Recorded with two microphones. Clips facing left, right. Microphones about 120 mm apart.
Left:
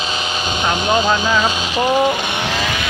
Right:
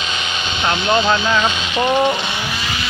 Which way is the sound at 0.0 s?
35° left (ahead or behind).